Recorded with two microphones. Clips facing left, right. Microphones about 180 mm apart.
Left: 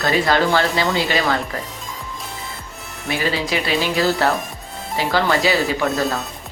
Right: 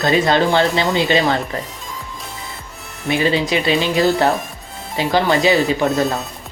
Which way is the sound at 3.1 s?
20° right (ahead or behind).